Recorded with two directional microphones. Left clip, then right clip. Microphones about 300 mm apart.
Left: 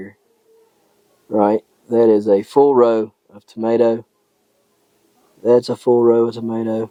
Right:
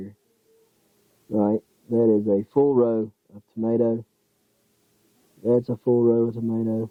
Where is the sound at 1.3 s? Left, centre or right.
Centre.